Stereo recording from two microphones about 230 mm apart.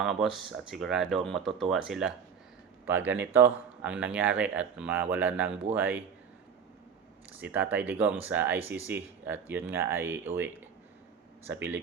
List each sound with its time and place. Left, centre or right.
0.0 s speech: centre
7.3 s speech: centre